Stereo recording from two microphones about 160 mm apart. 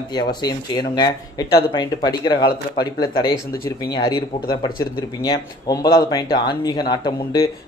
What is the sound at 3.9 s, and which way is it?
A man's voice, 25° left (ahead or behind).